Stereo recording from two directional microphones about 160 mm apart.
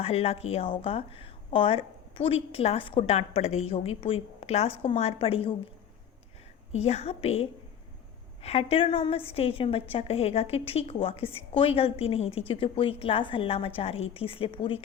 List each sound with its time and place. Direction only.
0.0 s a woman's voice: 40° left (ahead or behind)
6.7 s a woman's voice: 40° left (ahead or behind)